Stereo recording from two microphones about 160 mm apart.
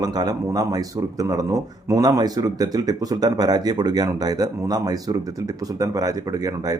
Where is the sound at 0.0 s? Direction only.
25° right (ahead or behind).